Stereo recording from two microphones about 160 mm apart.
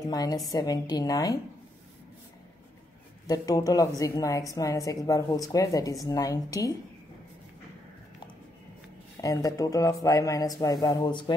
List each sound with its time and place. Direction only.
0.1 s a woman's voice: 25° left (ahead or behind)
3.3 s a woman's voice: 20° left (ahead or behind)
9.2 s a woman's voice: 20° left (ahead or behind)